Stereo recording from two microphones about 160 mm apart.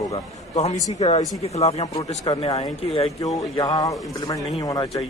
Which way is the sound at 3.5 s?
25° left (ahead or behind).